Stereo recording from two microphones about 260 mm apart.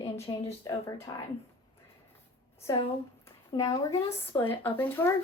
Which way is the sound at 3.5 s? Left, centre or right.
Centre.